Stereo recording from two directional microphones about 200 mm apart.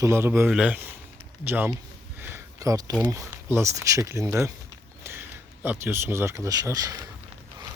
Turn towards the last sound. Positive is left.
turn(degrees=-15)  # may be behind; listen again after turning